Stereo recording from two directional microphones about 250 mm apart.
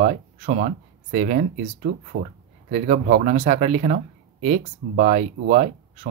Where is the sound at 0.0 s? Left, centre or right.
Right.